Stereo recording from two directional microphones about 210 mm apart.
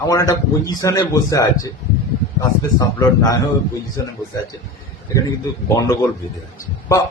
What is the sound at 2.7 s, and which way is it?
A man's voice, 15° left (ahead or behind).